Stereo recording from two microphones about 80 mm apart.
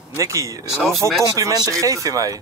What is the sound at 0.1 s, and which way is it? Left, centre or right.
Speech, right.